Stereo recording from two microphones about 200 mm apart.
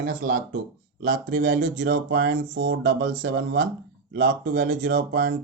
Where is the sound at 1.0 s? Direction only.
65° right (ahead or behind).